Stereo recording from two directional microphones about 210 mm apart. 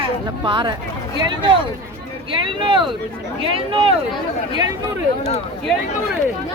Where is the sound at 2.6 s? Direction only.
25° right (ahead or behind).